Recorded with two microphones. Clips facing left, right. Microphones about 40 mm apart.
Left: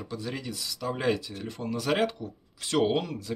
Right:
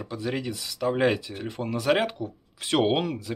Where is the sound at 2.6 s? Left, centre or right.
Right.